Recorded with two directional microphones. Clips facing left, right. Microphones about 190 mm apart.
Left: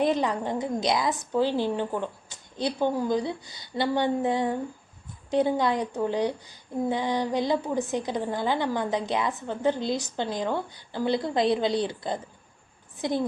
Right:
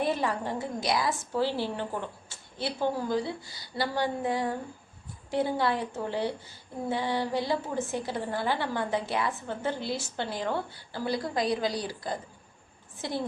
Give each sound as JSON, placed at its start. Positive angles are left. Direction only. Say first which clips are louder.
{"t": 0.0, "sound": "a woman's voice", "louder": "left 4 dB", "side_deg": 15}